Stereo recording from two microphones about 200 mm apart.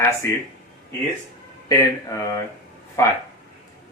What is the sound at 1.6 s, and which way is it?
Speech, 15° left (ahead or behind).